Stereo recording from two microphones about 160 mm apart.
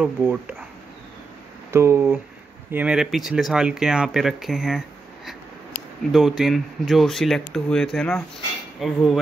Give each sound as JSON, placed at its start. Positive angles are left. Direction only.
{"t": 0.0, "sound": "speech", "side_deg": -10}
{"t": 1.7, "sound": "speech", "side_deg": -15}